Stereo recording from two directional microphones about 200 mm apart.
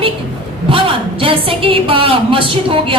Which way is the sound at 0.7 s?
25° right (ahead or behind).